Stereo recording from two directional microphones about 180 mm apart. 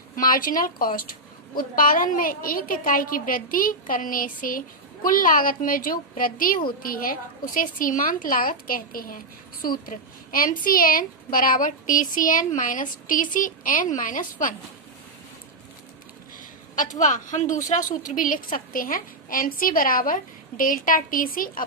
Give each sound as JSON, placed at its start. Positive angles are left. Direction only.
{"t": 0.2, "sound": "a woman's voice", "side_deg": 50}
{"t": 16.7, "sound": "a woman's voice", "side_deg": 45}